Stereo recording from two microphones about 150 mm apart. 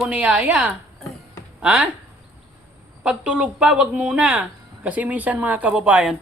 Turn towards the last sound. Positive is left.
turn(degrees=-5)  # may be behind; listen again after turning